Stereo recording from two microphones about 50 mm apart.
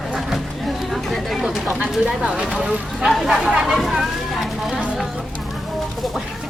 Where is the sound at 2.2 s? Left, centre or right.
Centre.